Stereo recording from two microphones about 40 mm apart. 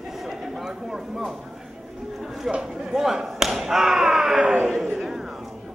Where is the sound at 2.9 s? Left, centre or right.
Centre.